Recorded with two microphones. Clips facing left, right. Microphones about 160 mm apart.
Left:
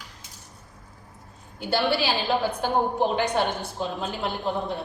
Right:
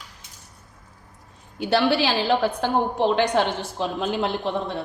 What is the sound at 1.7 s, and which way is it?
A woman's voice, 90° right.